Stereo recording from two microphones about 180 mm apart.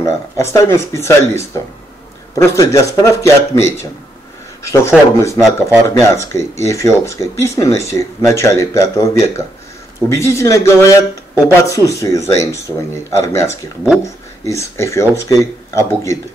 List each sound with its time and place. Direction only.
0.0 s speech: 15° left (ahead or behind)